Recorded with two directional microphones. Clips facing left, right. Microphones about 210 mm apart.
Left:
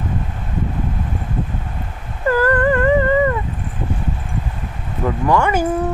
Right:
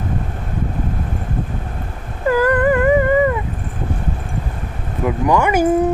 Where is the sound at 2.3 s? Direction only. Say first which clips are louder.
Right 1 dB; 15° right (ahead or behind).